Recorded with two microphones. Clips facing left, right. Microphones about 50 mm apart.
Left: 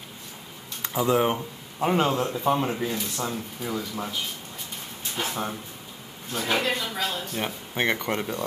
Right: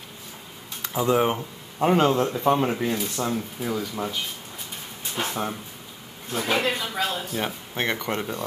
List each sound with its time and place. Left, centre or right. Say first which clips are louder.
0.8 s speech: right 1 dB; centre
2.6 s speech: right 3 dB; centre
5.2 s speech: right 2 dB; centre
6.3 s speech: right 1 dB; centre